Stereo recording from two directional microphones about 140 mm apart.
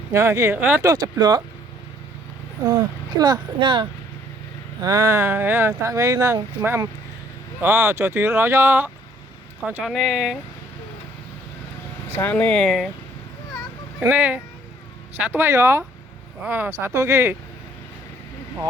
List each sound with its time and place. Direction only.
0.1 s speech: 20° right (ahead or behind)
0.9 s speech: 25° right (ahead or behind)
2.6 s speech: 30° right (ahead or behind)
4.8 s speech: 20° right (ahead or behind); by 10.3 s 5° right (ahead or behind)
12.1 s speech: 15° left (ahead or behind)
14.0 s speech: 10° right (ahead or behind)